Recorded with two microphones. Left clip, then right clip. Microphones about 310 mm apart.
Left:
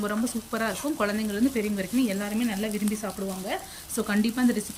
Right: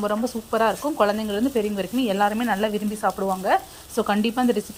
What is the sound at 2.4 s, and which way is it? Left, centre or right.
Frying, right.